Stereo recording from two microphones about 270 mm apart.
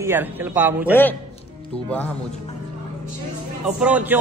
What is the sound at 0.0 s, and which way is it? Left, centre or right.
Speech, centre.